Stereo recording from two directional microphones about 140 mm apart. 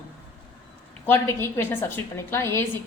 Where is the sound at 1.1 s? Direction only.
15° left (ahead or behind).